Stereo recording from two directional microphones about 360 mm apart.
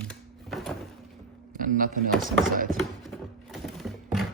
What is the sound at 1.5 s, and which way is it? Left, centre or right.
Speech, right.